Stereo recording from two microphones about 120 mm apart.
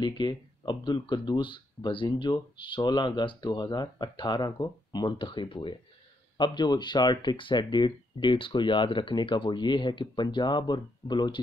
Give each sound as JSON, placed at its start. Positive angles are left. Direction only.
{"t": 0.0, "sound": "speech", "side_deg": 40}